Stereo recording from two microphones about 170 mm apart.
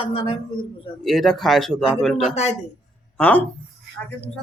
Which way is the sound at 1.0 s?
Centre (ahead or behind).